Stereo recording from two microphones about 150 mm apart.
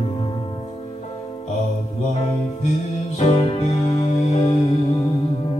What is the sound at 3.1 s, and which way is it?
Music, 40° left (ahead or behind).